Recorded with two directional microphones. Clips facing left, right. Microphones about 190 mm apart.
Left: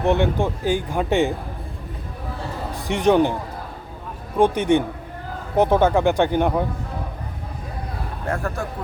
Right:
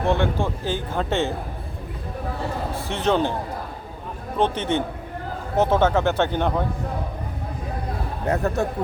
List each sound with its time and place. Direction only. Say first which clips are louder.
0.0 s speech: left 3 dB; 20° left (ahead or behind)
2.7 s speech: left 6 dB; 15° left (ahead or behind)
4.4 s speech: left 5 dB; 10° left (ahead or behind)
8.3 s a man's voice: right 4 dB; 20° right (ahead or behind)